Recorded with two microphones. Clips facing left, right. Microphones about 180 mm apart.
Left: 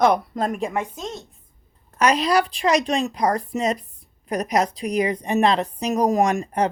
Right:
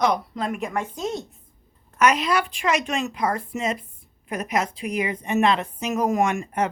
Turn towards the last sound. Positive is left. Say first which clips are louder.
# left 3 dB
turn(degrees=35)  # may be behind; listen again after turning